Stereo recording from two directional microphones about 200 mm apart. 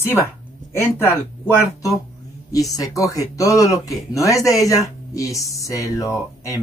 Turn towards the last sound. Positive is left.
turn(degrees=15)  # may be behind; listen again after turning